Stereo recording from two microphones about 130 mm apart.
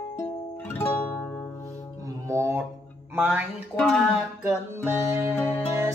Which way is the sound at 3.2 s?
10° right (ahead or behind).